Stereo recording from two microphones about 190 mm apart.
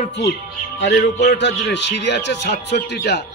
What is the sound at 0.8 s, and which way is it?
Music, 65° left (ahead or behind).